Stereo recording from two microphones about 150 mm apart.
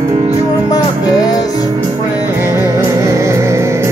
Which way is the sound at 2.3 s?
15° right (ahead or behind).